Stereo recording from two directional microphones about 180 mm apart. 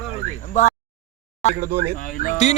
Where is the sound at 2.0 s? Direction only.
50° left (ahead or behind).